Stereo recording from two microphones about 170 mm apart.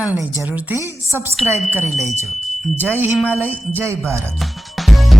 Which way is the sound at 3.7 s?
15° right (ahead or behind).